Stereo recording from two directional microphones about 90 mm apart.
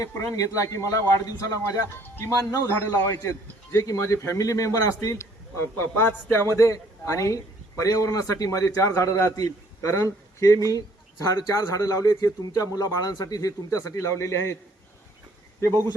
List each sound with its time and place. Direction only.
0.0 s speech: 40° left (ahead or behind)